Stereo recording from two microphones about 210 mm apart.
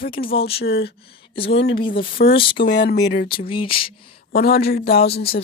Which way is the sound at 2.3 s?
25° left (ahead or behind).